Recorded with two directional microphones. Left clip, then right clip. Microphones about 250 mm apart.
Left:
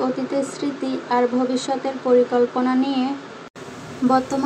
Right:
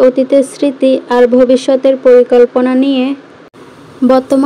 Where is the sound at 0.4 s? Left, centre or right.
Right.